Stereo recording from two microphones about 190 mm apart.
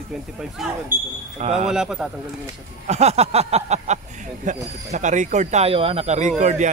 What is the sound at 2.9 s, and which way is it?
Speech, 35° right (ahead or behind).